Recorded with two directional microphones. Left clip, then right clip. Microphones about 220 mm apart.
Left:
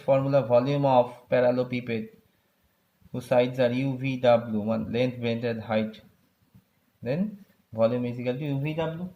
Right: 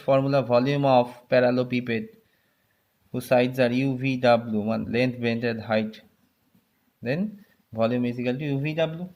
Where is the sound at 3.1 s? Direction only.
30° right (ahead or behind).